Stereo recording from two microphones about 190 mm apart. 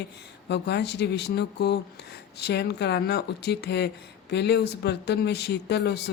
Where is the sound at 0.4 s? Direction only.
60° left (ahead or behind).